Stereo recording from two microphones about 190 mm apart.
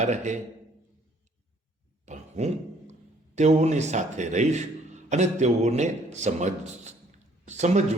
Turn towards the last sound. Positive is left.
turn(degrees=-40)  # may be behind; listen again after turning